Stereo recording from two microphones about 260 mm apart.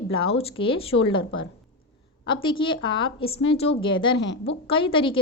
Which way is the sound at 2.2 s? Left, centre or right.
Centre.